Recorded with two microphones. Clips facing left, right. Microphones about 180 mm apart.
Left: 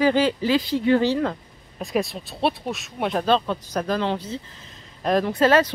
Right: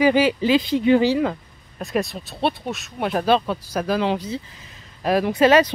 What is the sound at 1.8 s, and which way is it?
Speech, centre (ahead or behind).